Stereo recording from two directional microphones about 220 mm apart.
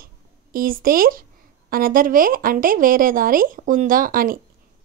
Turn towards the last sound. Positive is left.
turn(degrees=-40)  # may be behind; listen again after turning